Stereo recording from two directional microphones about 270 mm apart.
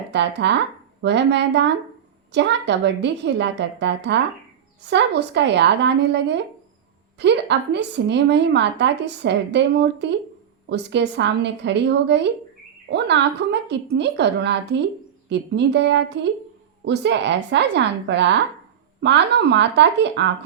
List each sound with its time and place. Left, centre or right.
0.1 s a woman's voice: right